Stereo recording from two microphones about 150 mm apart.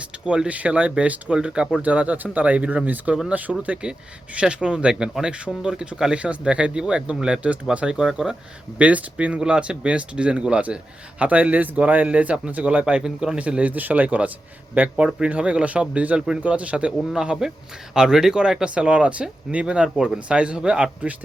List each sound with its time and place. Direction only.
0.3 s speech: 10° right (ahead or behind)